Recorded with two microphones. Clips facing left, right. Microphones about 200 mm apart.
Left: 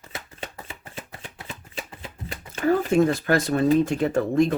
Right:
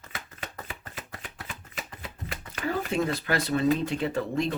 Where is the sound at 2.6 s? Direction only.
50° left (ahead or behind).